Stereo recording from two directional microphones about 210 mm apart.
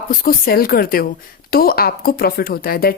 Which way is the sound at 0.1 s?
45° left (ahead or behind).